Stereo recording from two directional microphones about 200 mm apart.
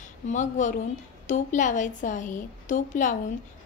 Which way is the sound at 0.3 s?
35° left (ahead or behind).